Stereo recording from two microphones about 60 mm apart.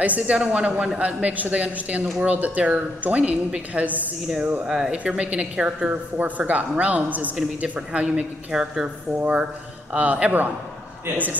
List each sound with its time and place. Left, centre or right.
0.0 s a woman's voice: right
4.6 s a woman's voice: centre; by 11.3 s right